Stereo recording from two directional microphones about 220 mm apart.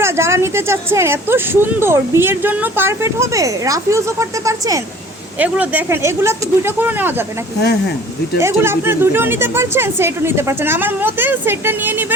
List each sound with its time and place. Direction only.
0.0 s speech: 10° right (ahead or behind)
7.6 s speech: 50° left (ahead or behind)
8.4 s speech: 10° right (ahead or behind)